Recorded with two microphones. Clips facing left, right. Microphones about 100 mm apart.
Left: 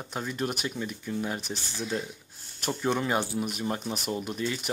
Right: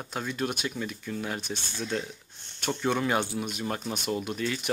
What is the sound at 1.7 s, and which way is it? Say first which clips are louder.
Speech: even; 5° left (ahead or behind).